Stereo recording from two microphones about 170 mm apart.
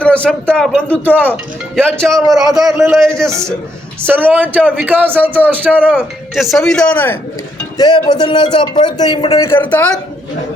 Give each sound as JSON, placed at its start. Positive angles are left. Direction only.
{"t": 0.0, "sound": "speech", "side_deg": 5}
{"t": 4.0, "sound": "speech", "side_deg": -10}
{"t": 7.8, "sound": "a man's voice", "side_deg": 25}
{"t": 9.4, "sound": "speech", "side_deg": 15}